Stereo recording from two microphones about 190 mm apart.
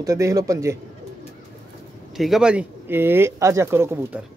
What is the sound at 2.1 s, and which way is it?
Speech, centre (ahead or behind).